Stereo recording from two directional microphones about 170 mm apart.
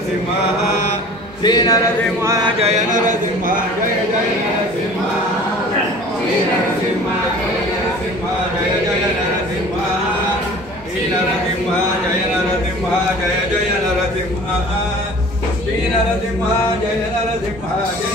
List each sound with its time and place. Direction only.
1.4 s a man's voice: 25° left (ahead or behind)
2.2 s a sound: 20° right (ahead or behind)
2.7 s a man's voice: 50° right (ahead or behind)